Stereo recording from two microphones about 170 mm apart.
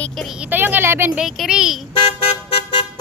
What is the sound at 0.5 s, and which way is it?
Speech, 10° right (ahead or behind).